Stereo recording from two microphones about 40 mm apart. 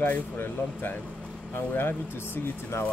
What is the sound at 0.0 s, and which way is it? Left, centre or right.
Speech, left.